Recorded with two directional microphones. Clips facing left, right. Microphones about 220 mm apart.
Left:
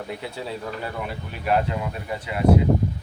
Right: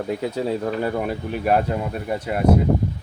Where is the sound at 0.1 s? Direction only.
40° right (ahead or behind).